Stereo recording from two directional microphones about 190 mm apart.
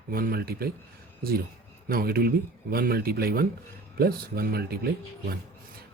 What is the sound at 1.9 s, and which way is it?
Speech, 50° right (ahead or behind).